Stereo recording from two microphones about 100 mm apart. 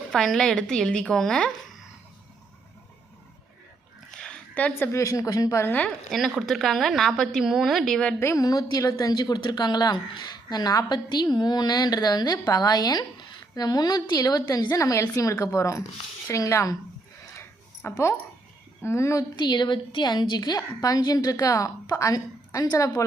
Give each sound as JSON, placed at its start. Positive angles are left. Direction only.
{"t": 0.1, "sound": "a woman's voice", "side_deg": 0}
{"t": 4.1, "sound": "a woman's voice", "side_deg": 10}
{"t": 5.6, "sound": "a woman's voice", "side_deg": 15}
{"t": 6.1, "sound": "a woman's voice", "side_deg": 0}
{"t": 8.2, "sound": "a woman's voice", "side_deg": 30}
{"t": 17.8, "sound": "speech", "side_deg": 25}
{"t": 19.4, "sound": "a woman's voice", "side_deg": 45}